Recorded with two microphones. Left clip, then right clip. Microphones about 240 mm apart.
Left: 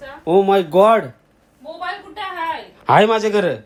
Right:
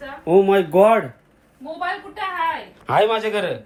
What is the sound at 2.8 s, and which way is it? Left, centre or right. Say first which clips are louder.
Speech: left 5 dB; left.